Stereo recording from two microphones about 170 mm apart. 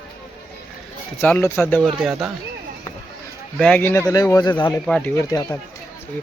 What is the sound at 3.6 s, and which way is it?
Speech, 10° left (ahead or behind).